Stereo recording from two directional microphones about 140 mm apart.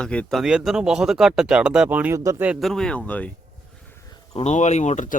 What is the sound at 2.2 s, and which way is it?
Speech, 25° right (ahead or behind).